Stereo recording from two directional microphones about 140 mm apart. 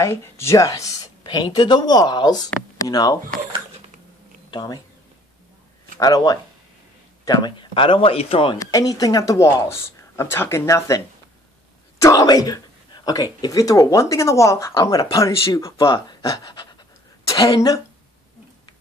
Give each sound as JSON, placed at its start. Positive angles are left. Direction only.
{"t": 0.0, "sound": "speech", "side_deg": 20}
{"t": 4.5, "sound": "speech", "side_deg": 30}
{"t": 5.9, "sound": "speech", "side_deg": 25}
{"t": 8.5, "sound": "speech", "side_deg": 25}
{"t": 12.0, "sound": "speech", "side_deg": 25}